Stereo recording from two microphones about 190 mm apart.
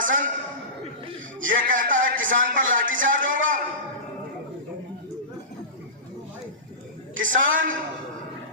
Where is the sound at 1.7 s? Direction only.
45° right (ahead or behind).